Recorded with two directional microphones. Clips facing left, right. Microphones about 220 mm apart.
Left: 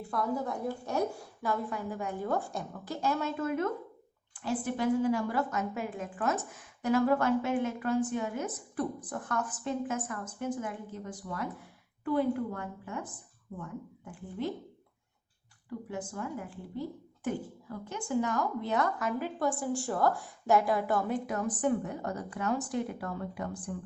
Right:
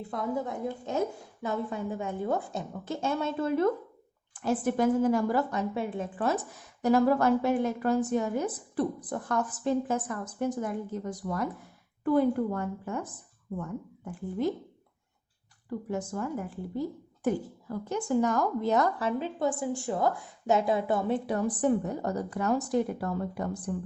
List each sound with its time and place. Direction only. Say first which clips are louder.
0.1 s a woman's voice: even; 20° right (ahead or behind)
4.4 s a woman's voice: right 5 dB; 45° right (ahead or behind)
15.9 s a woman's voice: right 5 dB; 45° right (ahead or behind)